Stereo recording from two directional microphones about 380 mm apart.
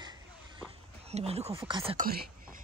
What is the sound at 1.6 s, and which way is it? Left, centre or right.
Speech, centre.